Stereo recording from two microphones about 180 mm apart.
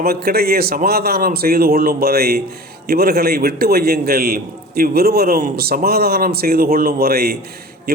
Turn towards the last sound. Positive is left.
turn(degrees=-60)  # may be behind; listen again after turning